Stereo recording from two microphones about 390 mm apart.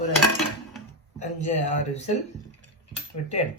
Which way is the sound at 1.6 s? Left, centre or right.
Centre.